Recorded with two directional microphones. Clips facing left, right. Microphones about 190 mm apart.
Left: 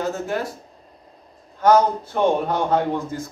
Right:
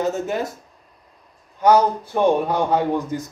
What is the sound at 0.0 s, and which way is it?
Speech, 20° right (ahead or behind).